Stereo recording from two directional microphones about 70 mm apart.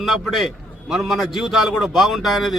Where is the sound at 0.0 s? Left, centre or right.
Centre.